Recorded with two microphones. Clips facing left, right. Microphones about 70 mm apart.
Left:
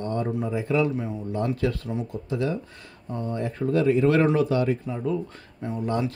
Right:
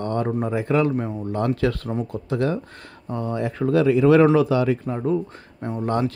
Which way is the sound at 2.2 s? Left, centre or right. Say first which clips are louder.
Right 4 dB; right.